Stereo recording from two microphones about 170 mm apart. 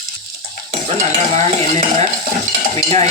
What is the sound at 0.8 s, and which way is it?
Stir, 45° right (ahead or behind).